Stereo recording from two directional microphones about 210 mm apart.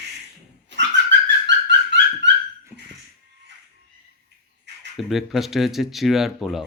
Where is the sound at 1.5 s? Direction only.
55° right (ahead or behind).